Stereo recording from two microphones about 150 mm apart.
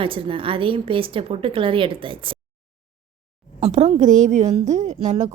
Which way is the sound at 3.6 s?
45° right (ahead or behind).